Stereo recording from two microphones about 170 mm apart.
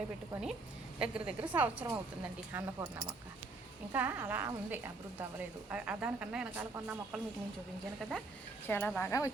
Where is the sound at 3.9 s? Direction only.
10° right (ahead or behind).